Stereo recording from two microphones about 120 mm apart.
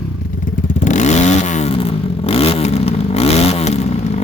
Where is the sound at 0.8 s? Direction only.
80° left.